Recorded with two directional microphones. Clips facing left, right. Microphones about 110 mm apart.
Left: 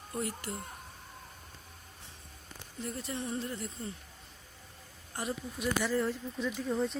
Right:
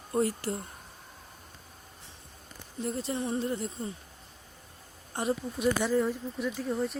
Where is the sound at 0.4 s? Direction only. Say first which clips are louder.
Right 7 dB; 35° right (ahead or behind).